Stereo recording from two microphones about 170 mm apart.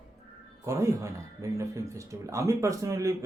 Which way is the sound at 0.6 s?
15° right (ahead or behind).